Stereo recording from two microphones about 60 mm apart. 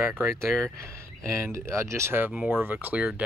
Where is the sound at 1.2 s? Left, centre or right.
Right.